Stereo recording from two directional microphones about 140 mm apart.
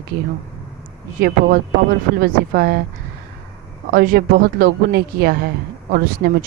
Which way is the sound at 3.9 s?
90° right.